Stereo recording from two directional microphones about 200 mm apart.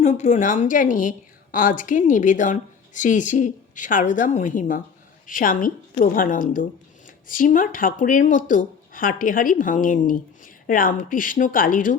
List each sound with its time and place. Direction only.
0.0 s a woman's voice: 35° left (ahead or behind)